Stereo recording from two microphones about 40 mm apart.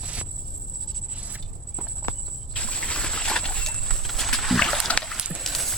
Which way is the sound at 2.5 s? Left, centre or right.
Left.